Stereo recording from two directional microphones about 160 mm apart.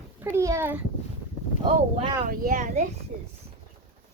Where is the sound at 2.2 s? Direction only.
60° right (ahead or behind).